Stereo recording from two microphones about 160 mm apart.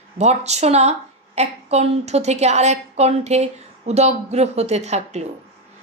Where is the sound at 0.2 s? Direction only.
45° right (ahead or behind).